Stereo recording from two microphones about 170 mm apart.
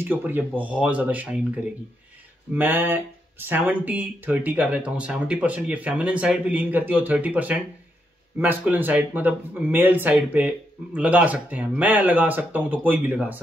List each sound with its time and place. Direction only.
0.0 s speech: 10° right (ahead or behind)